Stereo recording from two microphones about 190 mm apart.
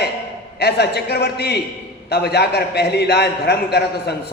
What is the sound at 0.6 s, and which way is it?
A man's voice, 60° left (ahead or behind).